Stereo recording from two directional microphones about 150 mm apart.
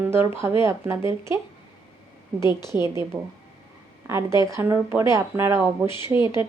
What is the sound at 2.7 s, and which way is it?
A woman's voice, 15° right (ahead or behind).